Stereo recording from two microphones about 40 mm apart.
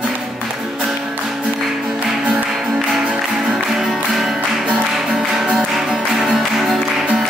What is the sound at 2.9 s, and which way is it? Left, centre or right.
Music, centre.